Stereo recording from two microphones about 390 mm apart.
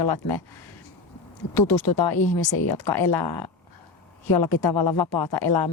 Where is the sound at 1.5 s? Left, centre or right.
Left.